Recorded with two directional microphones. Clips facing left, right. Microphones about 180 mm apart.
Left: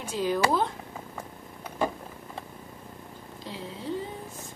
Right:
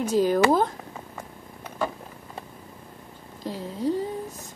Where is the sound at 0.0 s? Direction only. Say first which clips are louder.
Right 6 dB; 40° right (ahead or behind).